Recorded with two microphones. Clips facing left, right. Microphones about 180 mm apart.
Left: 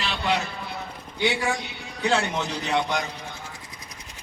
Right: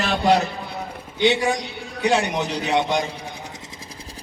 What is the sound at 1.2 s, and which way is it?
A man's voice, 20° right (ahead or behind).